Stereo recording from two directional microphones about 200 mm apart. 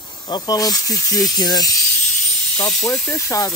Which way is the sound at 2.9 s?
15° left (ahead or behind).